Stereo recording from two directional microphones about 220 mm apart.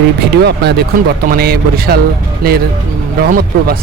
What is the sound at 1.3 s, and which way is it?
Speech, 45° right (ahead or behind).